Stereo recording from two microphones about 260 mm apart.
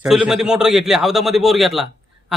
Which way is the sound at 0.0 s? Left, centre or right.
Centre.